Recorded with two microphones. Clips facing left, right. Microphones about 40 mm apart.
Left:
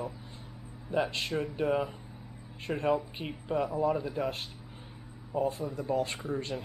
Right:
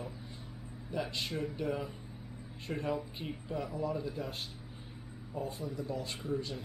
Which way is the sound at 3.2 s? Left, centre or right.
Left.